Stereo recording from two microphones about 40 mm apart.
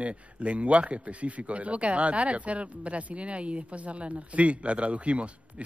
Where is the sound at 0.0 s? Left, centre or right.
Right.